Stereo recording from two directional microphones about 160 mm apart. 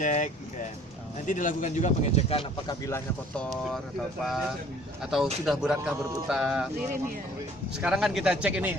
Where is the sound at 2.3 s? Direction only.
35° left (ahead or behind).